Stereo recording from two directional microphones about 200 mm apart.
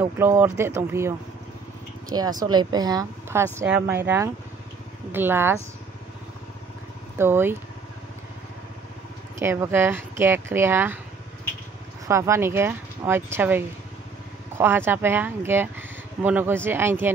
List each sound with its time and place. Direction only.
0.0 s a woman's voice: 10° right (ahead or behind)
7.2 s speech: 10° right (ahead or behind)
9.4 s speech: 15° right (ahead or behind)
12.1 s speech: 15° right (ahead or behind)